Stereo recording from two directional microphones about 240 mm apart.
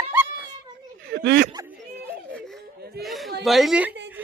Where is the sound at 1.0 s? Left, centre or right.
Right.